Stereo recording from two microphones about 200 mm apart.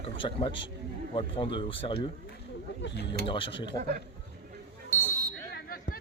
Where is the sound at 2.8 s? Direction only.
60° left (ahead or behind).